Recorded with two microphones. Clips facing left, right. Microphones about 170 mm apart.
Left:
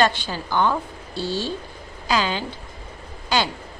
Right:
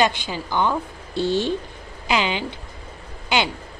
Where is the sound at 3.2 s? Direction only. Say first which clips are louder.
Even; 20° right (ahead or behind).